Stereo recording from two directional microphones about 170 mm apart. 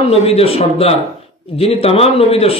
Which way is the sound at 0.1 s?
35° left (ahead or behind).